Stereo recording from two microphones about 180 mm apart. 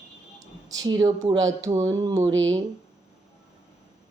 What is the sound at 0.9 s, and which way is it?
Speech, 20° right (ahead or behind).